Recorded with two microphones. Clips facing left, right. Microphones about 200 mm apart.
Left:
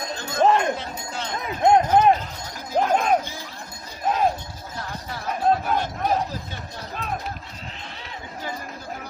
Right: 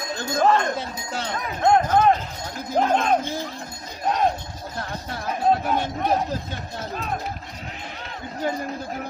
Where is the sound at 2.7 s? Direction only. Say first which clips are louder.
Even; 5° left (ahead or behind).